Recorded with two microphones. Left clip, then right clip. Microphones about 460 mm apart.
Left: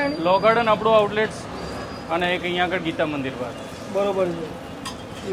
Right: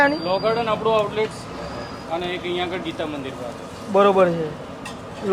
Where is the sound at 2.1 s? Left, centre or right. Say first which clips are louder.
Left 3 dB; left.